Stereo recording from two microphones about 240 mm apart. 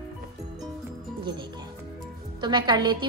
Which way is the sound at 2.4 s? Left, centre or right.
Centre.